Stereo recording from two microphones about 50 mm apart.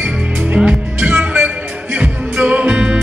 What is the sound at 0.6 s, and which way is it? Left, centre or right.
Music, right.